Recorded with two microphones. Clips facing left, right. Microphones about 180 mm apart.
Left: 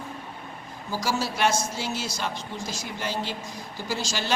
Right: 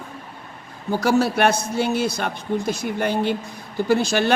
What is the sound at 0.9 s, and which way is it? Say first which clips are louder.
Speech: right 9 dB; 60° right (ahead or behind).